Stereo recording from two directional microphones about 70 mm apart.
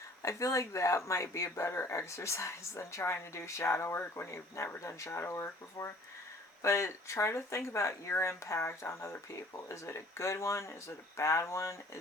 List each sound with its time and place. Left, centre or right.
0.2 s speech: left